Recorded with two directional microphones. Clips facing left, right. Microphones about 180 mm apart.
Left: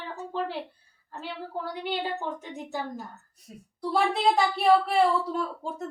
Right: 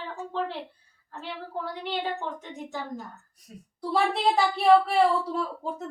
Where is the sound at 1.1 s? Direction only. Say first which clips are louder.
Even; 5° left (ahead or behind).